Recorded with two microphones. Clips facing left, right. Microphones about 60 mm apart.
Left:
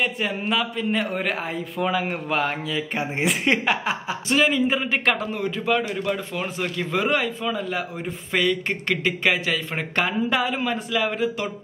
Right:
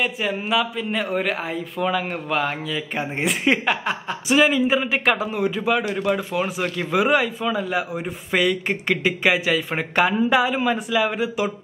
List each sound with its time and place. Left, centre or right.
0.0 s a man's voice: centre